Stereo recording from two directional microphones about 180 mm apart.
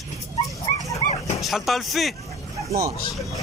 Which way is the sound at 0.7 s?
30° left (ahead or behind).